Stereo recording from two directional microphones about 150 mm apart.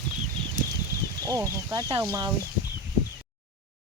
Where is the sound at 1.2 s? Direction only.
20° right (ahead or behind).